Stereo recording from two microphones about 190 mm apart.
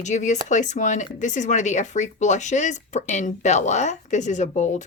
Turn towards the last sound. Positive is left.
turn(degrees=40)  # may be behind; listen again after turning